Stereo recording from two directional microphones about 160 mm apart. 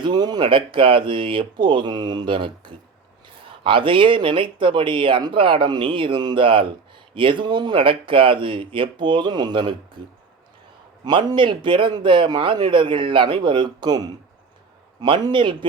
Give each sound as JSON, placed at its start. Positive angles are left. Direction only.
{"t": 0.0, "sound": "a man's voice", "side_deg": -25}
{"t": 11.0, "sound": "a man's voice", "side_deg": -25}